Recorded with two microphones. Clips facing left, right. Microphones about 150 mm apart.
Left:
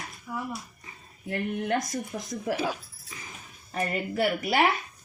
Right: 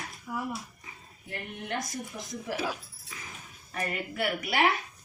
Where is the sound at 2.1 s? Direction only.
50° left (ahead or behind).